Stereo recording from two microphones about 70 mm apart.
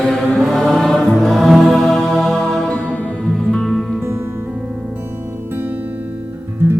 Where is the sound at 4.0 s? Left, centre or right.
Right.